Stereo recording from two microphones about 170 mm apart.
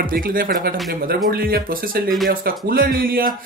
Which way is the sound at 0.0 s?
55° right (ahead or behind).